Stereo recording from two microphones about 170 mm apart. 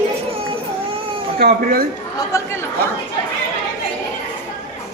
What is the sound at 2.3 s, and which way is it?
Speech, 15° left (ahead or behind).